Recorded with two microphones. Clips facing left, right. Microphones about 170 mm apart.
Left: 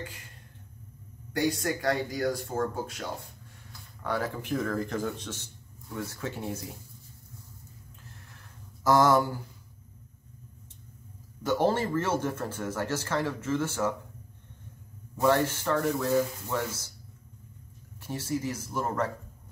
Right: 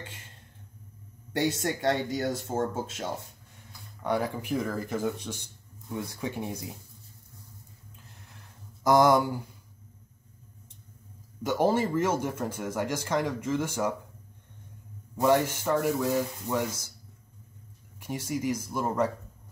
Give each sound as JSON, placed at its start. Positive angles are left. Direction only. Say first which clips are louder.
{"t": 0.0, "sound": "speech", "louder": "left 4 dB", "side_deg": -25}
{"t": 1.3, "sound": "speech", "louder": "even", "side_deg": -25}
{"t": 8.8, "sound": "speech", "louder": "right 1 dB", "side_deg": -15}
{"t": 11.4, "sound": "speech", "louder": "right 1 dB", "side_deg": -10}
{"t": 15.2, "sound": "speech", "louder": "right 1 dB", "side_deg": -15}
{"t": 18.0, "sound": "speech", "louder": "right 1 dB", "side_deg": -10}